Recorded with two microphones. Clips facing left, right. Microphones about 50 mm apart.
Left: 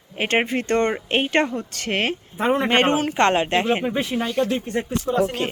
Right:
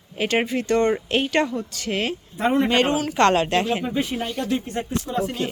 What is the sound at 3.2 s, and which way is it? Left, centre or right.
A man's voice, left.